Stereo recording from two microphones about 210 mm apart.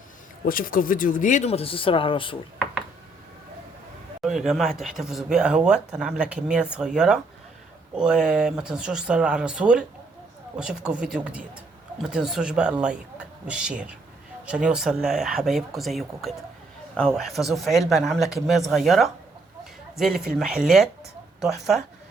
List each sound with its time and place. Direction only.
0.4 s speech: 40° left (ahead or behind); by 2.4 s 25° left (ahead or behind)
4.2 s speech: centre (ahead or behind)